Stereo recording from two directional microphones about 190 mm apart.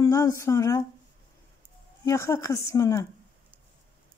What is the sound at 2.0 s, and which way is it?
Speech, 15° left (ahead or behind).